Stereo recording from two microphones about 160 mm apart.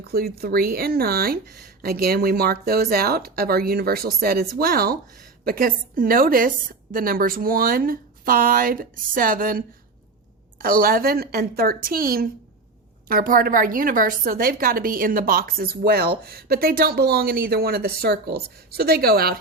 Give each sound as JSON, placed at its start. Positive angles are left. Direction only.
{"t": 0.3, "sound": "a woman's voice", "side_deg": -75}